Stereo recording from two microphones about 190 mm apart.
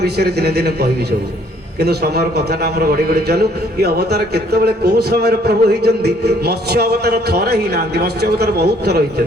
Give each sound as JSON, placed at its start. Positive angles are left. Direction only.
{"t": 0.0, "sound": "a man's voice", "side_deg": -60}